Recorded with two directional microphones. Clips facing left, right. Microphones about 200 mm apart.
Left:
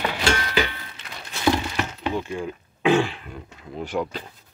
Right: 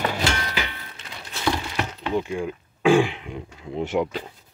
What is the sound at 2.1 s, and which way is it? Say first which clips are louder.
Speech: right 3 dB; 15° right (ahead or behind).